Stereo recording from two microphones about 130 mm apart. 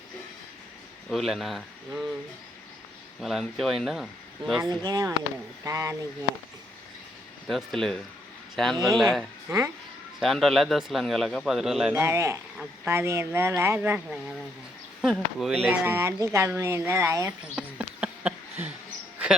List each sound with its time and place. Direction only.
1.1 s a man's voice: centre (ahead or behind)
3.2 s a man's voice: centre (ahead or behind)
4.9 s speech: 30° right (ahead or behind)
7.4 s a man's voice: centre (ahead or behind)
9.5 s speech: 25° right (ahead or behind)
10.2 s a man's voice: centre (ahead or behind)
11.9 s speech: 20° right (ahead or behind)
15.0 s a man's voice: 5° right (ahead or behind); by 17.3 s 20° right (ahead or behind)
17.4 s a sound: 10° right (ahead or behind)